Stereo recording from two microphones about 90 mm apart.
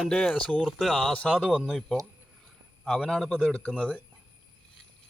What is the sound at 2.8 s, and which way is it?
Speech, 10° left (ahead or behind).